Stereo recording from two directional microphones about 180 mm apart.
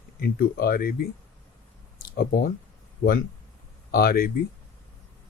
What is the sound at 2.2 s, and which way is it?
Speech, 55° left (ahead or behind).